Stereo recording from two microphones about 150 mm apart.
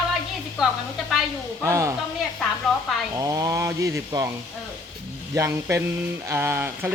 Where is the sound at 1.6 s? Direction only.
20° right (ahead or behind).